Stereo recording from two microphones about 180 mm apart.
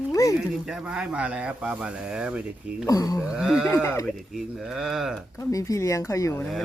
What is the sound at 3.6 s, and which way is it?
Speech, 15° left (ahead or behind).